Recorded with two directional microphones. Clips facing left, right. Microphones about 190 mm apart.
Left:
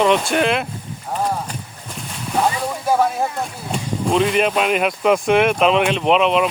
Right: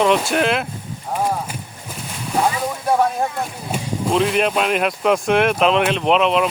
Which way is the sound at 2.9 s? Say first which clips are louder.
Even; centre (ahead or behind).